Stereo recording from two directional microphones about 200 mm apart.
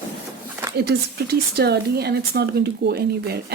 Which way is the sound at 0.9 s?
55° right (ahead or behind).